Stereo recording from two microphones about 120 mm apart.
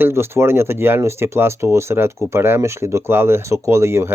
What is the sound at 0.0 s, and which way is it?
Speech, 20° right (ahead or behind).